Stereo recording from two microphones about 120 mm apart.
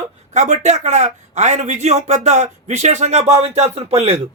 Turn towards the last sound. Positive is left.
turn(degrees=-60)  # may be behind; listen again after turning